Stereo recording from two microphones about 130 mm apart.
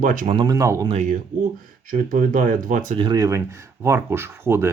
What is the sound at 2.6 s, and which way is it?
Speech, 75° right (ahead or behind).